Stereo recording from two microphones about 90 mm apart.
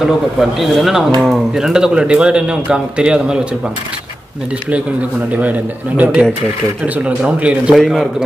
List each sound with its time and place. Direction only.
0.0 s speech: centre (ahead or behind)
5.3 s speech: 15° right (ahead or behind)
7.7 s speech: centre (ahead or behind)